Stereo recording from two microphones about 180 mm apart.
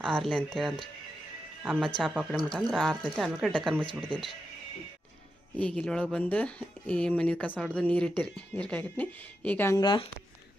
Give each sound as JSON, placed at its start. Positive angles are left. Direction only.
{"t": 0.1, "sound": "speech", "side_deg": 0}
{"t": 5.5, "sound": "speech", "side_deg": 5}
{"t": 9.8, "sound": "speech", "side_deg": 25}